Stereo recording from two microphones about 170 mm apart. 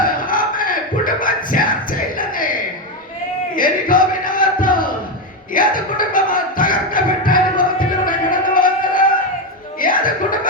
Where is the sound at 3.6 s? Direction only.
55° left (ahead or behind).